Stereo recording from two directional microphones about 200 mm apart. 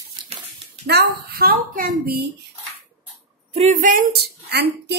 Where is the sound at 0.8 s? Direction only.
55° right (ahead or behind).